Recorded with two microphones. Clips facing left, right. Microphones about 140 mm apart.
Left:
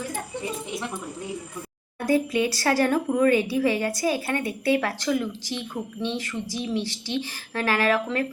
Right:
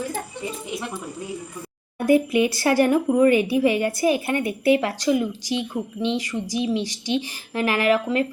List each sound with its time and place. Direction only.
2.0 s speech: 15° right (ahead or behind)